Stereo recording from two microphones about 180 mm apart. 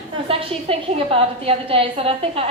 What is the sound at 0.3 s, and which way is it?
A woman's voice, 30° right (ahead or behind).